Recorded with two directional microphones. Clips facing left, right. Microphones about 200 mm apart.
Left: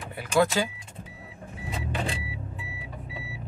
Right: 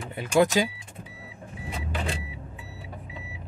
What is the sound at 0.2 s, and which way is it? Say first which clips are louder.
Speech: right 2 dB; 15° right (ahead or behind).